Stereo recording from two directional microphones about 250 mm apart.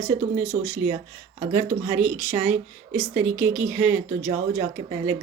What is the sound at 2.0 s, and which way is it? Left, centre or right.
Speech, centre.